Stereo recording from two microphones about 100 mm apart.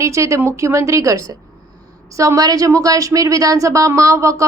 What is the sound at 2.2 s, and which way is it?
A woman's voice, 35° right (ahead or behind).